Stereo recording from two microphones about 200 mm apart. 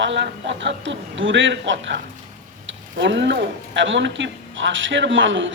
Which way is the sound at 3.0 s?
65° right (ahead or behind).